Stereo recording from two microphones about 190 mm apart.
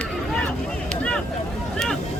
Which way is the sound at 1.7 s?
5° left (ahead or behind).